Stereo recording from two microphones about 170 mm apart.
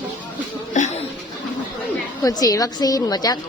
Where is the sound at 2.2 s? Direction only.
20° left (ahead or behind).